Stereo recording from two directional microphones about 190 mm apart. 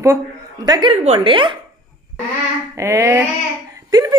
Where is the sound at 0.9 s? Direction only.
35° right (ahead or behind).